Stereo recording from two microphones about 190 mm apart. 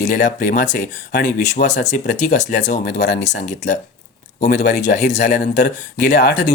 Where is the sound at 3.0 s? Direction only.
65° left (ahead or behind).